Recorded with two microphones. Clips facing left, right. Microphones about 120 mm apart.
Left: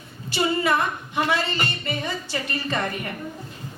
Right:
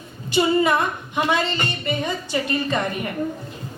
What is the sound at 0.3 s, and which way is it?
A woman's voice, 20° right (ahead or behind).